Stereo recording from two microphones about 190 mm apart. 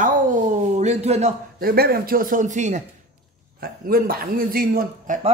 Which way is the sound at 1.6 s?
55° right (ahead or behind).